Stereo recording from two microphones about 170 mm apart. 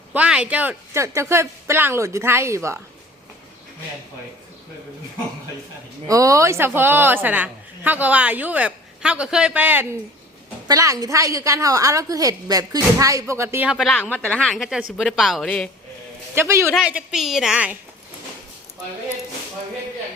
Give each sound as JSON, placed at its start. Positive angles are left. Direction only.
{"t": 0.1, "sound": "a woman's voice", "side_deg": -5}
{"t": 6.1, "sound": "a woman's voice", "side_deg": -20}
{"t": 13.7, "sound": "a woman's voice", "side_deg": -5}
{"t": 13.9, "sound": "a woman's voice", "side_deg": 10}
{"t": 16.3, "sound": "a man's voice", "side_deg": -15}